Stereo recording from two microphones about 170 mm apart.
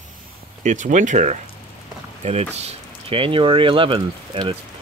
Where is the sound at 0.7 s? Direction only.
45° right (ahead or behind).